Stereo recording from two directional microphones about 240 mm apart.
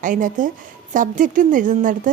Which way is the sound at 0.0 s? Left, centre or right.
Right.